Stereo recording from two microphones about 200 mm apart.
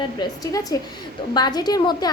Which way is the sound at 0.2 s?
15° left (ahead or behind).